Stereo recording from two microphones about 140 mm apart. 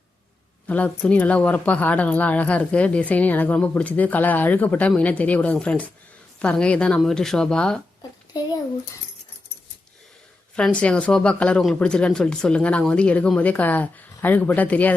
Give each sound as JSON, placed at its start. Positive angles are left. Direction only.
{"t": 0.7, "sound": "speech", "side_deg": 10}
{"t": 8.3, "sound": "a child's voice", "side_deg": 30}
{"t": 10.5, "sound": "speech", "side_deg": 5}